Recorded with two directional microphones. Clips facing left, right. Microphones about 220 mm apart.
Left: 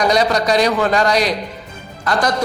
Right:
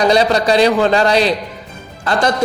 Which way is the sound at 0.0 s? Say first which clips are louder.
Right 3 dB; 30° right (ahead or behind).